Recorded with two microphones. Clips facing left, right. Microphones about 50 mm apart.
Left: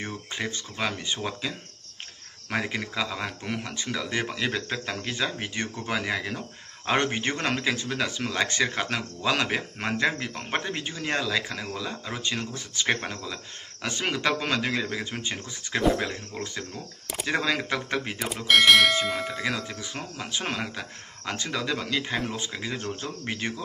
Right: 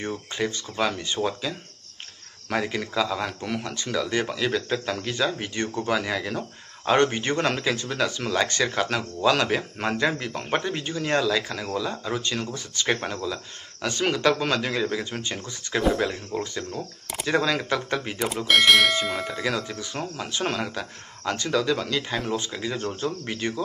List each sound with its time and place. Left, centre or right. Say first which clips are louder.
0.4 s speech: right 5 dB; centre
2.5 s speech: right 3 dB; centre
17.4 s speech: right 3 dB; centre
18.2 s speech: even; centre
19.3 s speech: right 2 dB; centre